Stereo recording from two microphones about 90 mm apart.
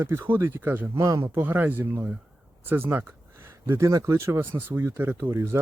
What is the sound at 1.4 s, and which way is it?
Speech, 20° right (ahead or behind).